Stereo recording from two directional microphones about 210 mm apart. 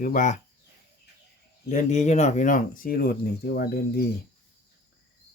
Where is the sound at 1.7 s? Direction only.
35° left (ahead or behind).